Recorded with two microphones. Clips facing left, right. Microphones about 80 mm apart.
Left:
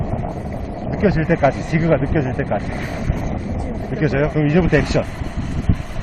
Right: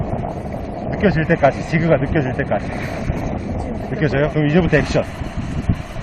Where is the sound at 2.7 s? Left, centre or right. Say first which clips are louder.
Right 1 dB; left.